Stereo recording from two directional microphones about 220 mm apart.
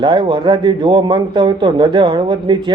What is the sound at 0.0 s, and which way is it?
A man's voice, 20° right (ahead or behind).